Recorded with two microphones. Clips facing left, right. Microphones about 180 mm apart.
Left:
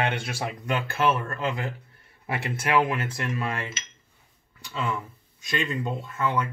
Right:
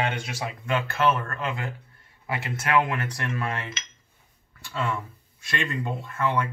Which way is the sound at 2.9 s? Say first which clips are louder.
Left 1 dB; 20° left (ahead or behind).